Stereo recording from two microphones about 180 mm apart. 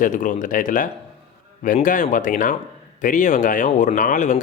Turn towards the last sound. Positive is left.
turn(degrees=45)  # may be behind; listen again after turning